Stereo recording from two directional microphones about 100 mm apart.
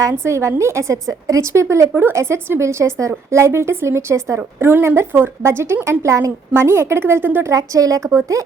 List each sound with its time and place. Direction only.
0.0 s a woman's voice: 25° right (ahead or behind)
7.5 s a woman's voice: 35° right (ahead or behind)